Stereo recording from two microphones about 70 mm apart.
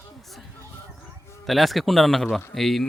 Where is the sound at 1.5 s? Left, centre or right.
Centre.